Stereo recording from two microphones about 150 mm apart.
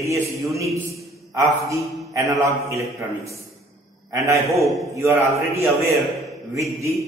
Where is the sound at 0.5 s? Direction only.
20° right (ahead or behind).